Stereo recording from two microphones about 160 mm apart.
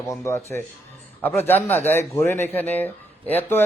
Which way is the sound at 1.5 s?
10° left (ahead or behind).